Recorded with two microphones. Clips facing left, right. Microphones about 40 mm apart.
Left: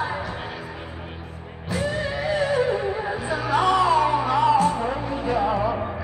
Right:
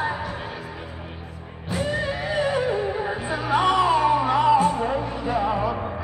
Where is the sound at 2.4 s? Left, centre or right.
Centre.